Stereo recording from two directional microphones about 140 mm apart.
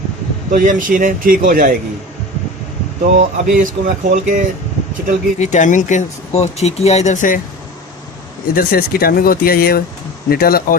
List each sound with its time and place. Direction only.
0.5 s speech: 70° right (ahead or behind)
3.0 s speech: 70° right (ahead or behind)
5.4 s speech: 60° left (ahead or behind)
8.5 s speech: 90° left